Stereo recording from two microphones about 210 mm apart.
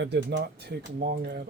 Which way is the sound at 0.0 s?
55° right (ahead or behind).